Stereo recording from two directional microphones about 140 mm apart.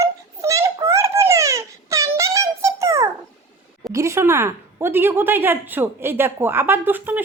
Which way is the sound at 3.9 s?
20° right (ahead or behind).